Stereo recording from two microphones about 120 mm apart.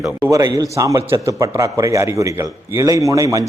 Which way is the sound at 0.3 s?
30° right (ahead or behind).